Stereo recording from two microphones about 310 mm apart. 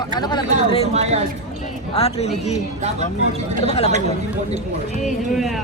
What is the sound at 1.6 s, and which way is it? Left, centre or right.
Speech, centre.